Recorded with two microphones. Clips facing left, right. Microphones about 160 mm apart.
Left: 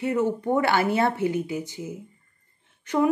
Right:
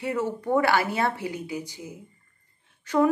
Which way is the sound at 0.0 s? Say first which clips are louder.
Left 4 dB; 25° left (ahead or behind).